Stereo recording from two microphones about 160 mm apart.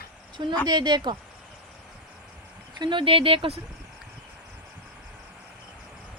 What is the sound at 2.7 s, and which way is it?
Speech, 30° right (ahead or behind).